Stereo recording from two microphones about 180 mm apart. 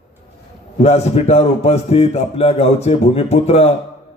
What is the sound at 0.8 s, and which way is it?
A man's voice, 35° left (ahead or behind).